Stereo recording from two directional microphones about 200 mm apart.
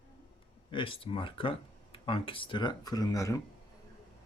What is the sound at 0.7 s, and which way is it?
Speech, 25° left (ahead or behind).